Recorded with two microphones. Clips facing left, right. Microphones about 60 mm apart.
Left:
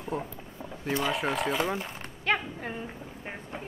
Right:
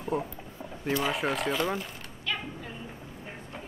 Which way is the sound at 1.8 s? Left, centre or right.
Left.